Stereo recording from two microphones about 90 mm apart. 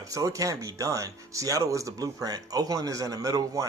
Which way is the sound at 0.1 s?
40° right (ahead or behind).